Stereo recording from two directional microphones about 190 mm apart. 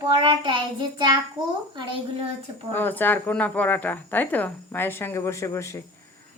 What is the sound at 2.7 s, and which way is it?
Speech, 10° left (ahead or behind).